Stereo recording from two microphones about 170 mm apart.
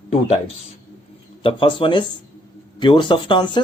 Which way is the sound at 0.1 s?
40° left (ahead or behind).